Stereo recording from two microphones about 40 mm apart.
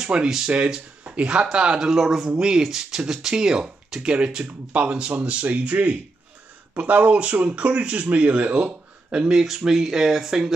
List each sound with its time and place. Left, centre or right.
0.0 s speech: right
0.5 s speech: right
1.9 s speech: centre; by 8.5 s right
8.5 s a sound: right
9.3 s speech: centre